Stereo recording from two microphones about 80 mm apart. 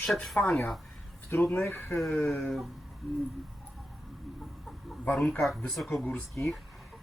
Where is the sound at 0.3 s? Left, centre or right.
Centre.